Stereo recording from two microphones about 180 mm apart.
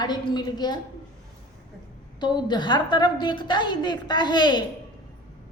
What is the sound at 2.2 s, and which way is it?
A woman's voice, 25° left (ahead or behind).